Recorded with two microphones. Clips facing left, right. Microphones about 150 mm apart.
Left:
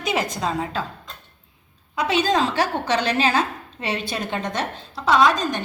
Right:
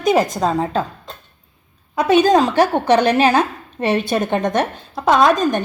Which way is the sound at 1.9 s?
50° right (ahead or behind).